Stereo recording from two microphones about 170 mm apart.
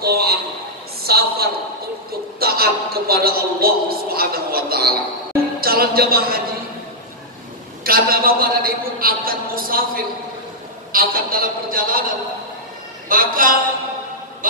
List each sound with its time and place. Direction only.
0.0 s a sound: 65° right (ahead or behind)
2.4 s a man's voice: 65° right (ahead or behind)
7.8 s a man's voice: 60° right (ahead or behind)
10.9 s a man's voice: 60° right (ahead or behind)
13.1 s a man's voice: 55° right (ahead or behind)
14.4 s a sound: 55° right (ahead or behind)